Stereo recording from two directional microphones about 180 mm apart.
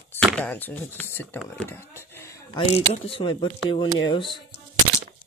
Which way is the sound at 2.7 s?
30° left (ahead or behind).